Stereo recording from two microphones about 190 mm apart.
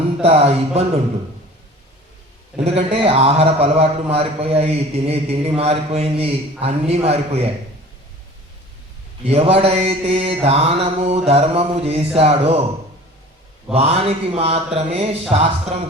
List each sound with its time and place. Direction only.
0.2 s a man's voice: 30° right (ahead or behind)
2.6 s a man's voice: 30° right (ahead or behind)
9.2 s a man's voice: 30° right (ahead or behind)
13.7 s a man's voice: 30° right (ahead or behind)